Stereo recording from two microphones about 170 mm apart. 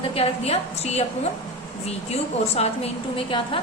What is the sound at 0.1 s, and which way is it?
A woman's voice, 35° left (ahead or behind).